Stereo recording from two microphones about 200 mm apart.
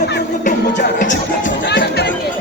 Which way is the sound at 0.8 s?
65° left (ahead or behind).